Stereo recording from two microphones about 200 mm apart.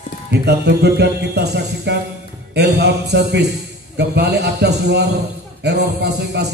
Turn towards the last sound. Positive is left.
turn(degrees=-55)  # may be behind; listen again after turning